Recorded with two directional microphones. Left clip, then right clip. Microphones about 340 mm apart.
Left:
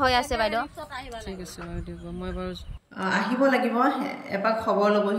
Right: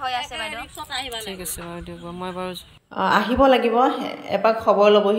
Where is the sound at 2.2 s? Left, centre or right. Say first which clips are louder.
Right 5 dB; centre.